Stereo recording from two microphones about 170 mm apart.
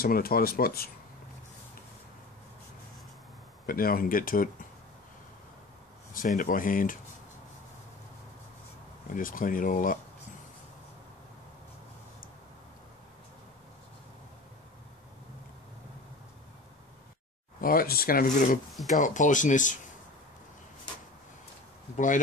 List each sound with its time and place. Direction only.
0.0 s speech: 60° left (ahead or behind)
3.6 s speech: 60° left (ahead or behind)
6.1 s speech: 50° left (ahead or behind)
9.1 s speech: 55° left (ahead or behind)
17.6 s speech: 60° left (ahead or behind)
21.9 s speech: 50° left (ahead or behind)